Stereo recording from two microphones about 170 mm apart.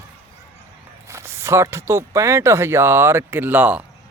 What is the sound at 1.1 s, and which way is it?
Speech, 15° right (ahead or behind).